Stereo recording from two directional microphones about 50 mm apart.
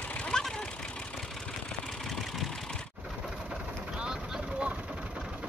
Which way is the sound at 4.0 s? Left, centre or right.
Centre.